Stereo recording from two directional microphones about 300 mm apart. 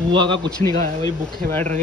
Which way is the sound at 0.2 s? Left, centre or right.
Centre.